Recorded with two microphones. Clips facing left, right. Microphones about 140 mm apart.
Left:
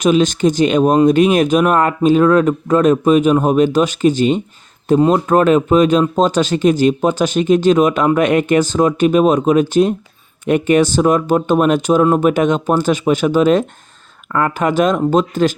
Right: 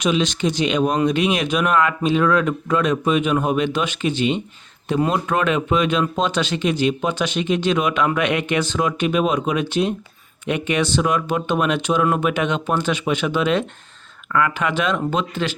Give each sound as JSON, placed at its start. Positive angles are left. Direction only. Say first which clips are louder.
{"t": 0.0, "sound": "speech", "louder": "left 7 dB", "side_deg": 45}